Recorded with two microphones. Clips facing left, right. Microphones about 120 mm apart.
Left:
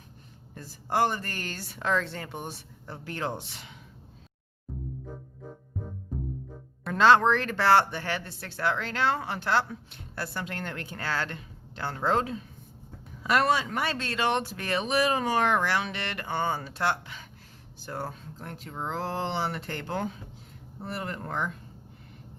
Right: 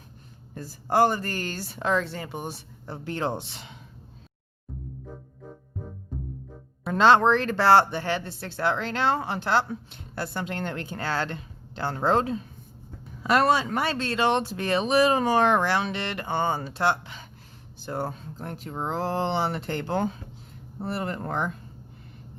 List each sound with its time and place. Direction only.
0.5 s speech: 40° right (ahead or behind)
2.0 s speech: 5° right (ahead or behind)
2.8 s speech: 25° right (ahead or behind)
6.8 s speech: 25° right (ahead or behind)